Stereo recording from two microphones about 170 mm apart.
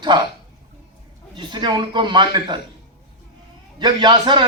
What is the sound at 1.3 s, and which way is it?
A man's voice, 25° right (ahead or behind).